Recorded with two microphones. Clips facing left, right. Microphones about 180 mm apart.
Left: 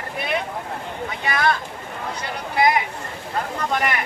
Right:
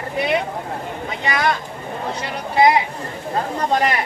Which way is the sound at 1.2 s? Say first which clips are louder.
Right 2 dB; 20° right (ahead or behind).